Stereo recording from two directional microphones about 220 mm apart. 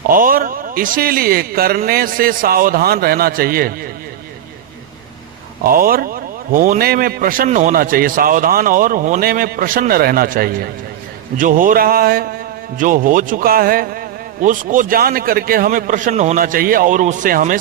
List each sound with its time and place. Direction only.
0.1 s speech: 40° right (ahead or behind)
5.7 s speech: 40° right (ahead or behind)